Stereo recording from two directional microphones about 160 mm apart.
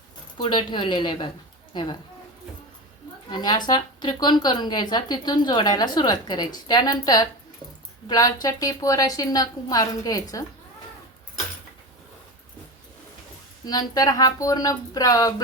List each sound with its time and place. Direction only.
0.4 s a woman's voice: 30° left (ahead or behind)
3.2 s speech: 25° left (ahead or behind)
13.7 s speech: 25° left (ahead or behind)